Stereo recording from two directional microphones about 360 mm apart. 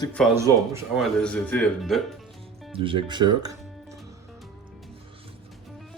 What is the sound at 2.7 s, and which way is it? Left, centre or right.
Speech, centre.